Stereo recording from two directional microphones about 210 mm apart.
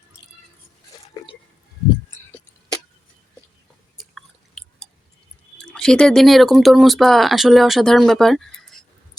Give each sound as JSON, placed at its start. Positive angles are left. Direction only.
{"t": 1.2, "sound": "a sound", "side_deg": 15}
{"t": 3.9, "sound": "chewing", "side_deg": 0}
{"t": 5.7, "sound": "speech", "side_deg": 5}